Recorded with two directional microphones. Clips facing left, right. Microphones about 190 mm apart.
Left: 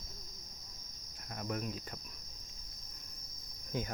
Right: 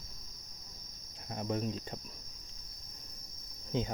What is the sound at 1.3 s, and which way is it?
Cricket, 25° right (ahead or behind).